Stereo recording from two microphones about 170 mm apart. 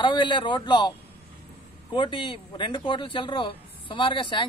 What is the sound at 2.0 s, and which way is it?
Speech, 30° left (ahead or behind).